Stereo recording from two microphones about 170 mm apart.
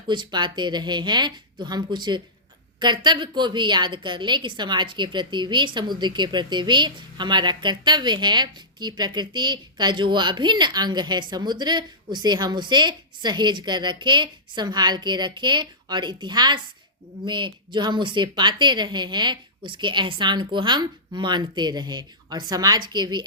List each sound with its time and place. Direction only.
0.1 s a woman's voice: 25° right (ahead or behind)